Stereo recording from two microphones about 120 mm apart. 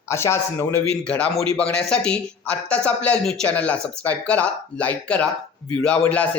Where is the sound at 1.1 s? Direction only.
10° left (ahead or behind).